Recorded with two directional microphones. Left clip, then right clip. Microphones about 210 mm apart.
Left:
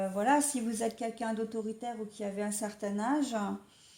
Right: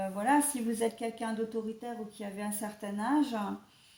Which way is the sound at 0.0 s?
40° left (ahead or behind).